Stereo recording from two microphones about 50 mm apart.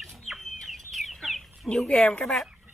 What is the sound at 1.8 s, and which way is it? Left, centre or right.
Speech, left.